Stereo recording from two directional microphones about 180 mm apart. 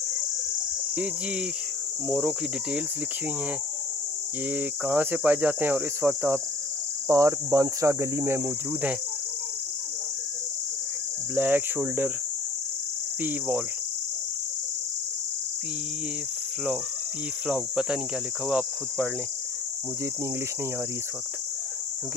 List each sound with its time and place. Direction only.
2.0 s speech: 5° right (ahead or behind)
4.5 s speech: 10° right (ahead or behind)
11.3 s speech: 10° right (ahead or behind)
17.5 s speech: 5° right (ahead or behind)